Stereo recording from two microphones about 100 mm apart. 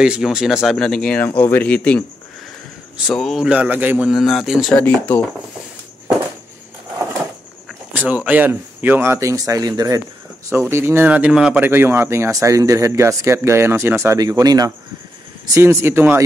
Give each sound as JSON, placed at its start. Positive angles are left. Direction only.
{"t": 0.0, "sound": "speech", "side_deg": -5}
{"t": 3.2, "sound": "speech", "side_deg": 5}
{"t": 3.4, "sound": "speech", "side_deg": -15}
{"t": 4.1, "sound": "speech", "side_deg": 0}
{"t": 4.8, "sound": "speech", "side_deg": 15}
{"t": 7.9, "sound": "speech", "side_deg": -15}
{"t": 10.5, "sound": "speech", "side_deg": -25}
{"t": 11.6, "sound": "speech", "side_deg": -20}
{"t": 14.1, "sound": "speech", "side_deg": -40}
{"t": 15.6, "sound": "speech", "side_deg": -25}